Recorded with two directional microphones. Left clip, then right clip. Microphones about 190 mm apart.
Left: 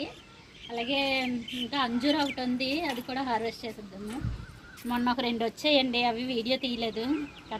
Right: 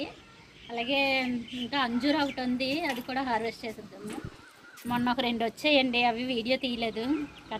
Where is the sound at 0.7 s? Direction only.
10° left (ahead or behind).